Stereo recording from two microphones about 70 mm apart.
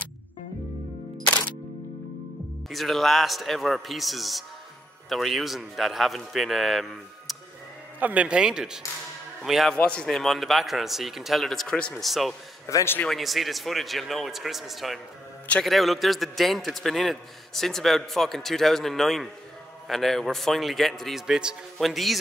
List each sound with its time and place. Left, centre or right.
2.7 s a man's voice: centre
8.0 s a man's voice: centre
11.7 s speech: centre
12.0 s a man's voice: centre
12.7 s a man's voice: left
13.1 s a man's voice: centre
21.3 s speech: centre
21.7 s a man's voice: centre